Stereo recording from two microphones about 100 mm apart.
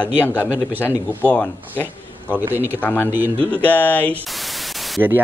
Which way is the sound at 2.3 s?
20° right (ahead or behind).